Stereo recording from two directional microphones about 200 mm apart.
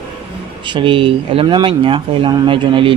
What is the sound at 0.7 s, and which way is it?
Speech, 25° right (ahead or behind).